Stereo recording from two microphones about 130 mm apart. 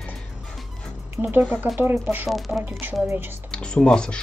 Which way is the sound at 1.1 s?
15° right (ahead or behind).